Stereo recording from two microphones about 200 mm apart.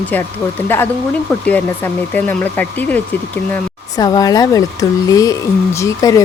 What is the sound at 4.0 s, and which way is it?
Speech, 20° left (ahead or behind).